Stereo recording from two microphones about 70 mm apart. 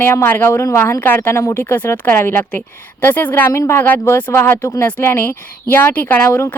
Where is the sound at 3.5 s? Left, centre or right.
Left.